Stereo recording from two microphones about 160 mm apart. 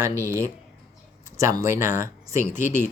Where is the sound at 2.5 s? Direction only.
50° left (ahead or behind).